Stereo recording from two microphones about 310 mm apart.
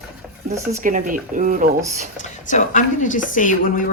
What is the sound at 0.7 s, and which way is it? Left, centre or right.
Speech, right.